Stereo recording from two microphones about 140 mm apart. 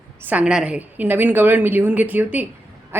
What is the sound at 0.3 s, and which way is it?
A woman's voice, 10° right (ahead or behind).